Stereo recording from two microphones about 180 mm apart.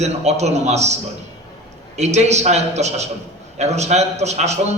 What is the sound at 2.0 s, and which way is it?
A man's voice, 40° right (ahead or behind).